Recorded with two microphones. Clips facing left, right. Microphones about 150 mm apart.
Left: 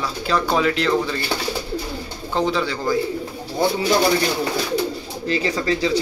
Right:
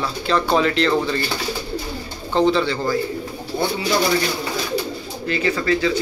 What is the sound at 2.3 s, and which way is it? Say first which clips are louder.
Speech: right 4 dB; 10° left (ahead or behind).